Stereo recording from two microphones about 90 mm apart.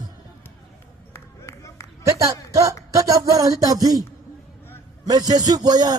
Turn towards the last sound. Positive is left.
turn(degrees=-50)  # may be behind; listen again after turning